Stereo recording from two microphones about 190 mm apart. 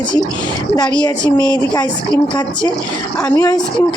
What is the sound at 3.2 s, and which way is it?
Speech, 15° left (ahead or behind).